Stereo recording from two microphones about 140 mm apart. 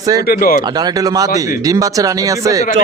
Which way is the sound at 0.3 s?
90° left.